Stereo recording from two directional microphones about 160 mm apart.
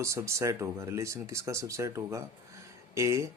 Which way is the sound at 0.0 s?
20° right (ahead or behind).